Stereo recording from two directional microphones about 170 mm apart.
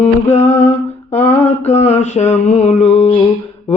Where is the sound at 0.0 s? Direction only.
40° left (ahead or behind).